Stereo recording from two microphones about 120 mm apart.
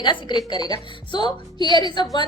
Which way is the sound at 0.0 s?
40° left (ahead or behind).